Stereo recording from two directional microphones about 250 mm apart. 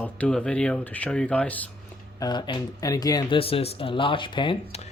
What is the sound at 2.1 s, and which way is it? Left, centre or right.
Speech, centre.